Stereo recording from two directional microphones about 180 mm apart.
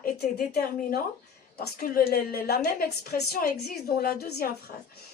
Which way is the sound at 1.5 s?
55° left (ahead or behind).